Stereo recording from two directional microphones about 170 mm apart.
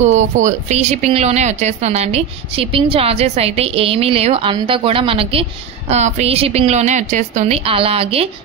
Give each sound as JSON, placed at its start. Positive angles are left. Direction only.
{"t": 0.0, "sound": "speech", "side_deg": -45}